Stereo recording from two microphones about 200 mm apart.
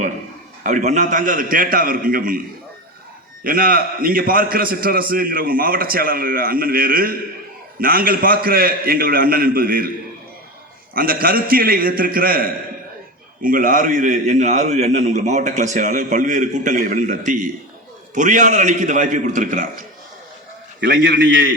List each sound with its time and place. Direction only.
0.6 s a man's voice: 40° right (ahead or behind)
3.4 s a man's voice: 45° right (ahead or behind)
10.9 s a man's voice: 45° right (ahead or behind)
20.8 s a man's voice: 60° right (ahead or behind)